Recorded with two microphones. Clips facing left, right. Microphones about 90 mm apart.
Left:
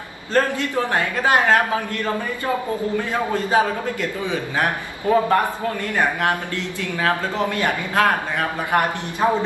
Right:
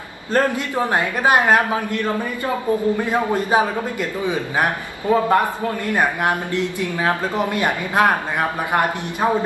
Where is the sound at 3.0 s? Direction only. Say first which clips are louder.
Right 3 dB; 20° right (ahead or behind).